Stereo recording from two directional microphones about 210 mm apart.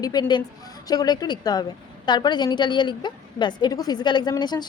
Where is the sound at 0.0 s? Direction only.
20° left (ahead or behind).